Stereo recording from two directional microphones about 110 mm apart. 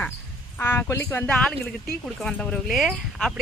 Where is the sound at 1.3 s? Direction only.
5° left (ahead or behind).